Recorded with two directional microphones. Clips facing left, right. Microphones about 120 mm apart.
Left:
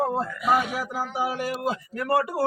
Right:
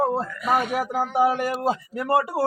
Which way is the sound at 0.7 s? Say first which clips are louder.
Right 6 dB; 55° right (ahead or behind).